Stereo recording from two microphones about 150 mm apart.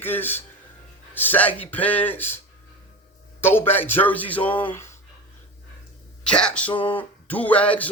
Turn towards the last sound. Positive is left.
turn(degrees=10)  # may be behind; listen again after turning